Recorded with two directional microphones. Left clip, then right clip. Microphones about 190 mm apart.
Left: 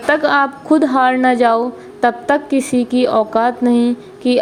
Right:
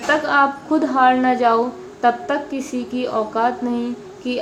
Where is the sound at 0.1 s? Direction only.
40° left (ahead or behind).